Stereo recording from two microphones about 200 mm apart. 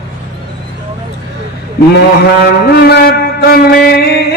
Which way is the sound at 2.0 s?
55° left (ahead or behind).